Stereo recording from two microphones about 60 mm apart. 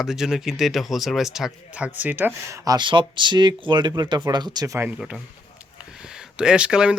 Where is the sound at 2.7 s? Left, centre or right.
Right.